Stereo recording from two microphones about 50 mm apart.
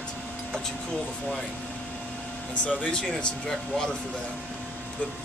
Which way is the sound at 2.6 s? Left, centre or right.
Left.